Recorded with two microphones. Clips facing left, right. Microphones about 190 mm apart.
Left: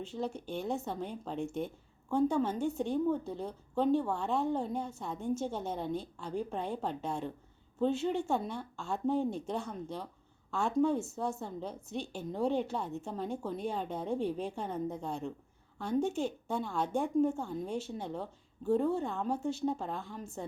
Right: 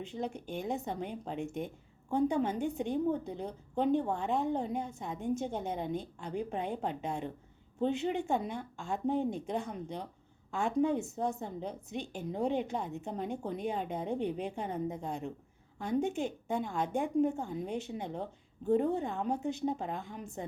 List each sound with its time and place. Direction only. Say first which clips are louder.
0.0 s a woman's voice: left 1 dB; 15° right (ahead or behind)